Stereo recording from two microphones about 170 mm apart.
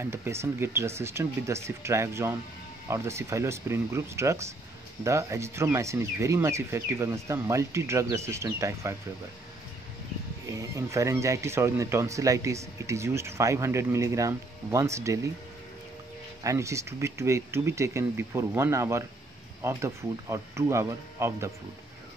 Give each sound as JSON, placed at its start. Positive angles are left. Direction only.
{"t": 0.0, "sound": "speech", "side_deg": -15}
{"t": 10.5, "sound": "speech", "side_deg": -20}
{"t": 16.4, "sound": "speech", "side_deg": -15}